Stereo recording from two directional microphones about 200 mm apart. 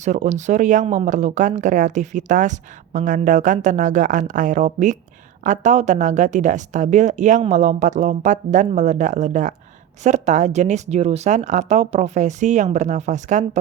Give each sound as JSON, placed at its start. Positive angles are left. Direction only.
{"t": 0.0, "sound": "speech", "side_deg": -35}